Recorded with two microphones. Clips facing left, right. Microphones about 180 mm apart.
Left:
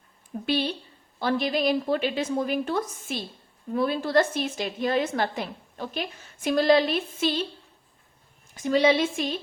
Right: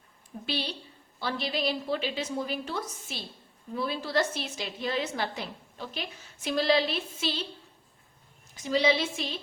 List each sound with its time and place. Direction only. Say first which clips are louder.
0.4 s a woman's voice: left 7 dB; 50° left (ahead or behind)
8.5 s a woman's voice: left 5 dB; 55° left (ahead or behind)